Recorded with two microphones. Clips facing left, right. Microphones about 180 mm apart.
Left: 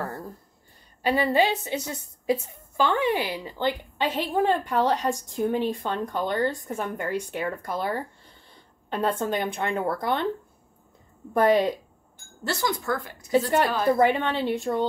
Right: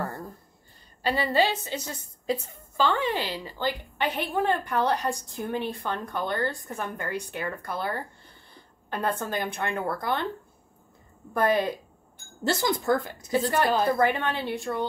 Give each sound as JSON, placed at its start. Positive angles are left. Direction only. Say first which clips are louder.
{"t": 1.0, "sound": "a woman's voice", "louder": "left 2 dB", "side_deg": 15}
{"t": 11.3, "sound": "a woman's voice", "louder": "left 4 dB", "side_deg": 20}
{"t": 12.4, "sound": "speech", "louder": "right 3 dB", "side_deg": -25}
{"t": 13.9, "sound": "a woman's voice", "louder": "left 3 dB", "side_deg": 20}